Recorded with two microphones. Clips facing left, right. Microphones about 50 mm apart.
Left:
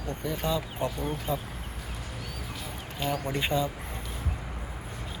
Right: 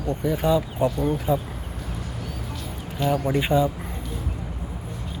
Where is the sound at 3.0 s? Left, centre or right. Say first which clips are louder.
Right 7 dB; centre.